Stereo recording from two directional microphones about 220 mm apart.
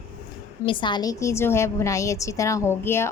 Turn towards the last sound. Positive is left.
turn(degrees=10)  # may be behind; listen again after turning